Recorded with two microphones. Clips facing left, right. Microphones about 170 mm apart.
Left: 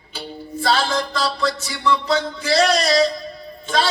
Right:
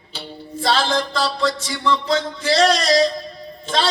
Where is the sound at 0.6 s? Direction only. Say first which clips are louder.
Right 1 dB; 30° right (ahead or behind).